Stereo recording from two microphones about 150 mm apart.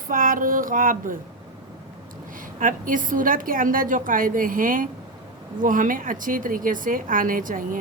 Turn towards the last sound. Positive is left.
turn(degrees=-65)  # may be behind; listen again after turning